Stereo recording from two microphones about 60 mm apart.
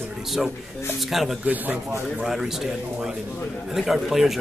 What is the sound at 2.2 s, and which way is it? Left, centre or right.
A man's voice, centre.